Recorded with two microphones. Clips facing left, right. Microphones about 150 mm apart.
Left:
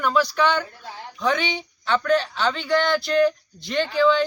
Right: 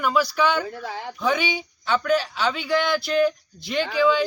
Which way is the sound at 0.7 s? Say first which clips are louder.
Right 7 dB; 90° right.